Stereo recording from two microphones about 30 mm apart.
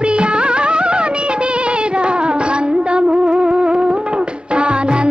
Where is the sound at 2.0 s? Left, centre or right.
Right.